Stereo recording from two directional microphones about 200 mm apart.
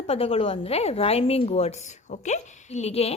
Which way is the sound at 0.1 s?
30° left (ahead or behind).